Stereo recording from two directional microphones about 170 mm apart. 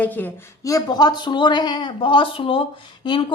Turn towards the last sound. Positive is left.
turn(degrees=30)  # may be behind; listen again after turning